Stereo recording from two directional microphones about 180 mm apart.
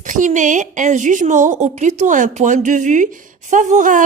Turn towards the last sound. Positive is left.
turn(degrees=-45)  # may be behind; listen again after turning